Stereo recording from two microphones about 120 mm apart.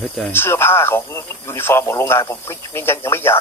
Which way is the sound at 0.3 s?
20° left (ahead or behind).